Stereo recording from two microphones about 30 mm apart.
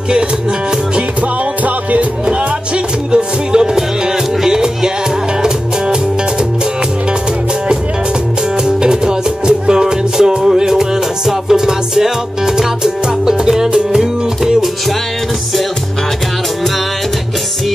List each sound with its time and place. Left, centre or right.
1.6 s music: right
3.1 s music: right
4.4 s music: centre
8.6 s music: right